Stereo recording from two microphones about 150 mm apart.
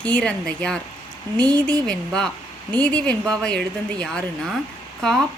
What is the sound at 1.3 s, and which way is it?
Speech, 30° right (ahead or behind).